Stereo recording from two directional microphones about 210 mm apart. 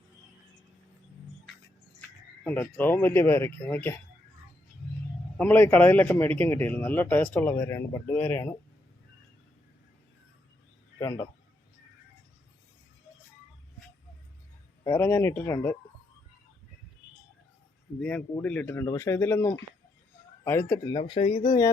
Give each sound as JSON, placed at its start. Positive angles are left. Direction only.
{"t": 2.0, "sound": "speech", "side_deg": 10}
{"t": 5.4, "sound": "a man's voice", "side_deg": 10}
{"t": 11.0, "sound": "a man's voice", "side_deg": 15}
{"t": 14.8, "sound": "a man's voice", "side_deg": 10}
{"t": 18.0, "sound": "a man's voice", "side_deg": 5}